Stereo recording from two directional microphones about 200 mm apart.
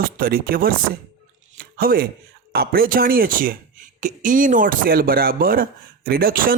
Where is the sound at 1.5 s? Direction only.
50° right (ahead or behind).